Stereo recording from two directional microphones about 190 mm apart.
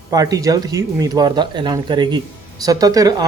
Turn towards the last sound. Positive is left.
turn(degrees=-20)  # may be behind; listen again after turning